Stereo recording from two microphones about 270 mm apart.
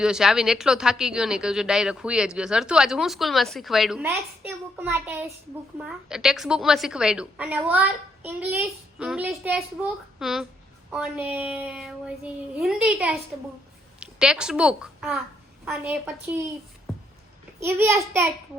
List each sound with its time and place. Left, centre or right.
0.0 s a woman's voice: centre
17.6 s a child's voice: centre